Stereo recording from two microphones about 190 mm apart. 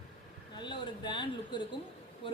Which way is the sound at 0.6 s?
25° left (ahead or behind).